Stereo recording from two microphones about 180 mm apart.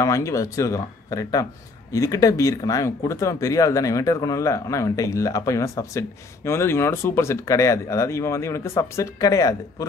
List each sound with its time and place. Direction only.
0.0 s speech: 15° left (ahead or behind)